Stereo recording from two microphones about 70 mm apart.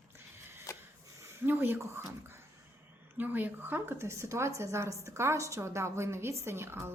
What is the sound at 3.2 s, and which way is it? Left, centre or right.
A woman's voice, right.